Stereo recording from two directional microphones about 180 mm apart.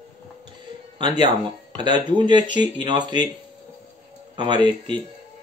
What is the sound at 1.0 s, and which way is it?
Speech, 25° right (ahead or behind).